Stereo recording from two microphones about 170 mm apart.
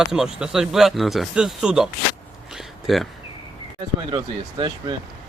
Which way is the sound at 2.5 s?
Centre (ahead or behind).